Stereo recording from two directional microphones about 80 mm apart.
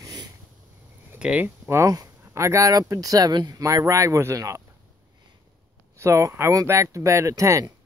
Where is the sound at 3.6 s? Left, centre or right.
Right.